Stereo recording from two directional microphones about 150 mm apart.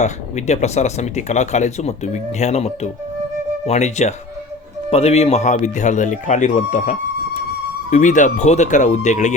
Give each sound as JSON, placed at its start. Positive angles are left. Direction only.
{"t": 0.0, "sound": "speech", "side_deg": 50}